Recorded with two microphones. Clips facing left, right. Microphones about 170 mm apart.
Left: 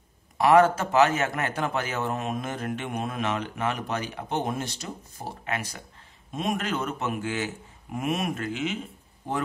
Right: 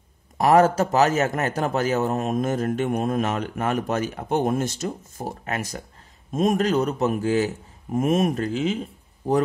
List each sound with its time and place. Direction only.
0.4 s a man's voice: 40° right (ahead or behind)